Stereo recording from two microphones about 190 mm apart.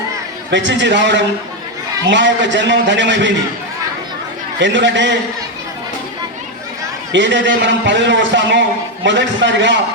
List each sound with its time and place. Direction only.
0.5 s a man's voice: 70° right (ahead or behind)
4.6 s a man's voice: 70° right (ahead or behind)
7.1 s a man's voice: 70° right (ahead or behind)